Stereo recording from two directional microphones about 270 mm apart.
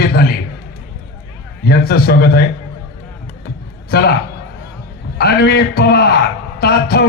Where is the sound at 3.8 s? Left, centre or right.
Left.